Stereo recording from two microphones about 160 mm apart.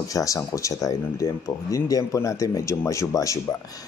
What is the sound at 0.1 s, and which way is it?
Speech, 20° left (ahead or behind).